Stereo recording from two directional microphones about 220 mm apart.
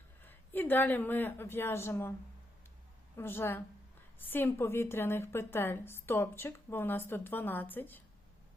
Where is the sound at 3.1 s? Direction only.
10° left (ahead or behind).